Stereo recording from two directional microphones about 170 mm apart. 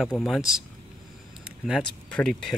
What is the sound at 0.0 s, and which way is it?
Speech, centre (ahead or behind).